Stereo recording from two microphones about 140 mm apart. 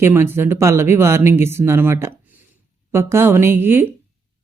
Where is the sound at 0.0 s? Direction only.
15° right (ahead or behind).